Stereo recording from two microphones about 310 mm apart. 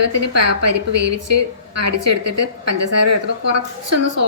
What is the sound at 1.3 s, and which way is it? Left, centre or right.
A woman's voice, right.